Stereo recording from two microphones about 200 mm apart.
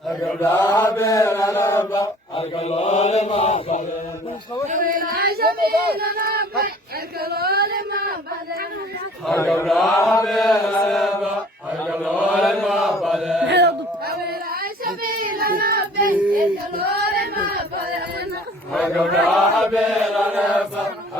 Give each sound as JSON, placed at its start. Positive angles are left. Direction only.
{"t": 0.3, "sound": "mantra", "side_deg": 15}
{"t": 2.3, "sound": "chant", "side_deg": 30}
{"t": 4.7, "sound": "a sound", "side_deg": -40}
{"t": 9.6, "sound": "mantra", "side_deg": 0}
{"t": 9.9, "sound": "chant", "side_deg": 15}
{"t": 10.2, "sound": "chant", "side_deg": 0}
{"t": 13.5, "sound": "a sound", "side_deg": -60}
{"t": 19.3, "sound": "chant", "side_deg": 0}